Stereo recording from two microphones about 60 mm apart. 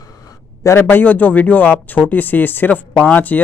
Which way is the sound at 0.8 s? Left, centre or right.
Left.